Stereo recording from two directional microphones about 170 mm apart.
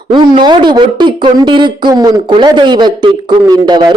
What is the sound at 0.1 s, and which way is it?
Speech, 25° right (ahead or behind).